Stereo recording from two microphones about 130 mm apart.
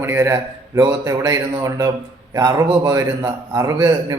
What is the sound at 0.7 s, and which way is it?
A man's voice, 30° right (ahead or behind).